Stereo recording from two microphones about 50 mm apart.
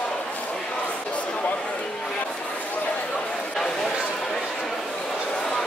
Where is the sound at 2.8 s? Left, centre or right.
Left.